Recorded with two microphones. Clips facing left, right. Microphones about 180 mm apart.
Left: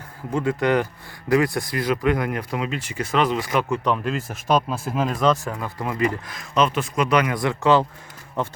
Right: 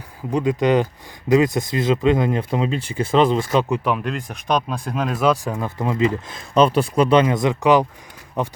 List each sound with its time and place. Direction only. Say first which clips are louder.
0.3 s speech: right 3 dB; 15° right (ahead or behind)
3.8 s speech: even; centre (ahead or behind)
5.5 s speech: right 4 dB; 20° right (ahead or behind)